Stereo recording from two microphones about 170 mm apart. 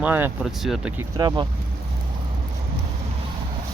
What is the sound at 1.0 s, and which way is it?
Speech, 20° right (ahead or behind).